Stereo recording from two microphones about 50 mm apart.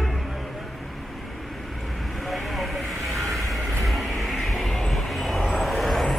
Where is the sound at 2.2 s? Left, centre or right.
Centre.